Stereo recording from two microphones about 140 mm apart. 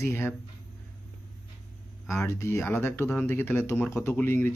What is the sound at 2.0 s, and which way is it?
Speech, 20° left (ahead or behind).